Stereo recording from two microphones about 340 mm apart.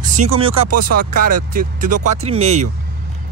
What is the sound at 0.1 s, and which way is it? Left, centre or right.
A man's voice, centre.